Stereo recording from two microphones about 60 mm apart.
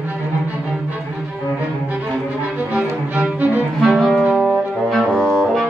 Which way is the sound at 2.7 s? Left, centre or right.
Right.